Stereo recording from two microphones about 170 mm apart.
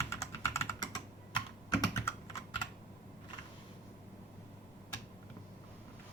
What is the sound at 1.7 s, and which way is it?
Computer keyboard, 15° left (ahead or behind).